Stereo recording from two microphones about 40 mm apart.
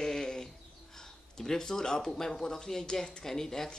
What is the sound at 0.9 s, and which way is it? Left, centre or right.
A man's voice, centre.